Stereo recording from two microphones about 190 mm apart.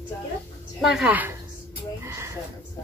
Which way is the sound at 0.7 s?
Centre (ahead or behind).